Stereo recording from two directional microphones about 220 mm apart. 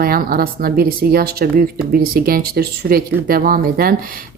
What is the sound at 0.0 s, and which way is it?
Speech, 40° right (ahead or behind).